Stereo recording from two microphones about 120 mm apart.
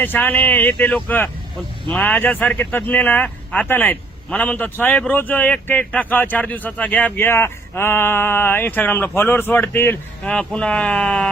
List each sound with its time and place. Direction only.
0.0 s speech: 15° left (ahead or behind)
10.3 s speech: 10° left (ahead or behind)